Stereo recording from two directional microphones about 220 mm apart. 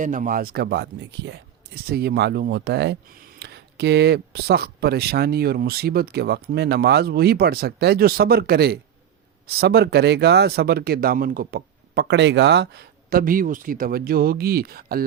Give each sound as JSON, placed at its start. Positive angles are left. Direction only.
{"t": 0.0, "sound": "speech", "side_deg": -35}